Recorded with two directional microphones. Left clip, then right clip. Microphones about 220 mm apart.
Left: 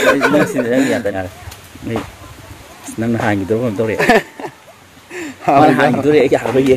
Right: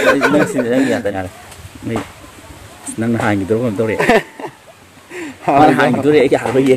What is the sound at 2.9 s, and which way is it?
Speech, 10° right (ahead or behind).